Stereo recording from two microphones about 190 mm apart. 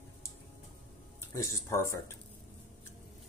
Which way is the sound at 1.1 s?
15° left (ahead or behind).